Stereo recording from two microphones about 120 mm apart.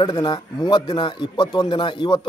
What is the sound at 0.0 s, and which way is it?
A man's voice, 35° left (ahead or behind).